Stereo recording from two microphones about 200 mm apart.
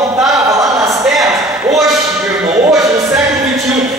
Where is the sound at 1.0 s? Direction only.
Centre (ahead or behind).